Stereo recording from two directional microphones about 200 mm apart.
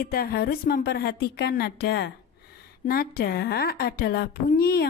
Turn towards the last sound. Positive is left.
turn(degrees=50)  # may be behind; listen again after turning